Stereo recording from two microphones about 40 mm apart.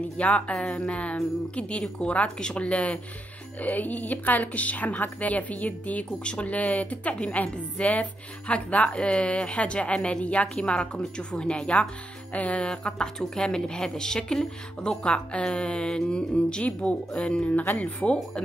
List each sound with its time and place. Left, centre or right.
0.2 s a woman's voice: left
3.6 s a woman's voice: left
12.3 s a woman's voice: left
12.6 s a woman's voice: left
17.6 s a woman's voice: left
18.0 s a woman's voice: left